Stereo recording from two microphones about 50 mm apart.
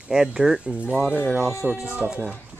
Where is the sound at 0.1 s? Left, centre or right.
Centre.